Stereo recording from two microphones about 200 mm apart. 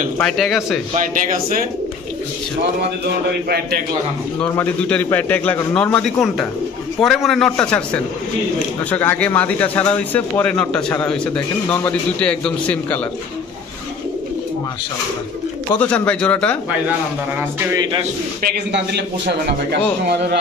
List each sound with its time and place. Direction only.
0.2 s a man's voice: centre (ahead or behind)
0.9 s speech: 45° right (ahead or behind)
3.4 s speech: 50° right (ahead or behind)
4.4 s a man's voice: 5° left (ahead or behind)
15.8 s speech: 5° left (ahead or behind)
17.4 s speech: 10° right (ahead or behind)
18.4 s a man's voice: 55° right (ahead or behind)